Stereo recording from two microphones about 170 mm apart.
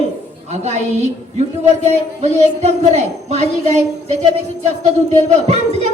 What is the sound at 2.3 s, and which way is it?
A woman's voice, 40° right (ahead or behind).